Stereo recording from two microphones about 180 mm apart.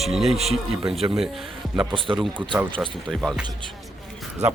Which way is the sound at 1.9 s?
30° right (ahead or behind).